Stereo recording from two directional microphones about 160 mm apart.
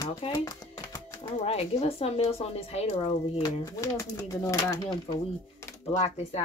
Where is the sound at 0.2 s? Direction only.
25° left (ahead or behind).